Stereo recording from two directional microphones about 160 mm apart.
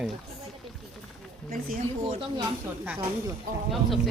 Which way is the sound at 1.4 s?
65° right (ahead or behind).